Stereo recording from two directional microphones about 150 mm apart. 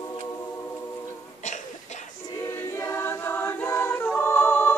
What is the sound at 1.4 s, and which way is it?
Cough, 50° left (ahead or behind).